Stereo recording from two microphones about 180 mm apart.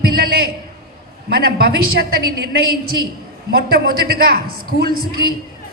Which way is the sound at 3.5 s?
55° right (ahead or behind).